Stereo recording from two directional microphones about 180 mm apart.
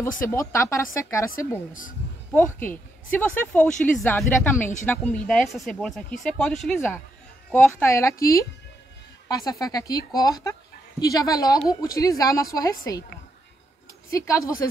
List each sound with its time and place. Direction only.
0.3 s speech: 15° left (ahead or behind)
1.7 s a man's voice: 50° left (ahead or behind)
2.3 s a woman's voice: 10° left (ahead or behind)
14.1 s speech: 20° left (ahead or behind)